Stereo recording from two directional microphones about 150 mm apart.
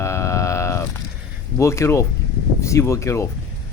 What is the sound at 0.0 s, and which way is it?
Sheep, 20° left (ahead or behind).